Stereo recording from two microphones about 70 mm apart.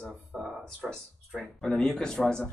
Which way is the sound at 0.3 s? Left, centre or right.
Centre.